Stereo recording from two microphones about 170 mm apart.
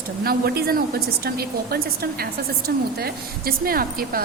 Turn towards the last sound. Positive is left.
turn(degrees=-60)  # may be behind; listen again after turning